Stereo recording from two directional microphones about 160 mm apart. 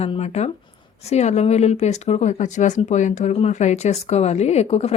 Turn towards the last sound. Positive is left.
turn(degrees=40)  # may be behind; listen again after turning